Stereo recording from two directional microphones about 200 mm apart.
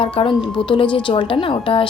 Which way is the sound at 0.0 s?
25° left (ahead or behind).